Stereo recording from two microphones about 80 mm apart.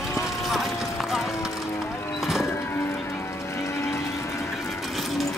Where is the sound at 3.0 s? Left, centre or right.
Left.